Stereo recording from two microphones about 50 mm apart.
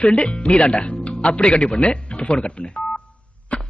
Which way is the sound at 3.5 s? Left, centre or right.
Left.